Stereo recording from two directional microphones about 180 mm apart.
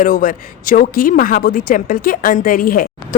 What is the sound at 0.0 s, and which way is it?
A woman's voice, 50° left (ahead or behind).